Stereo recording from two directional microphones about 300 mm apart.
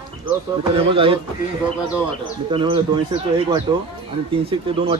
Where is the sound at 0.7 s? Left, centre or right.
Centre.